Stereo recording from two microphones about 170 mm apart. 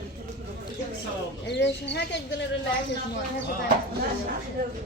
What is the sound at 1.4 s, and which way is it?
Speech, 90° left.